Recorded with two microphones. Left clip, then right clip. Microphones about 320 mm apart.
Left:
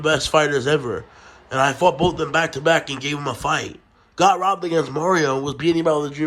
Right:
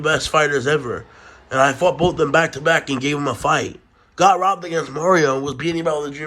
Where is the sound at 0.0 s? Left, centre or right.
Centre.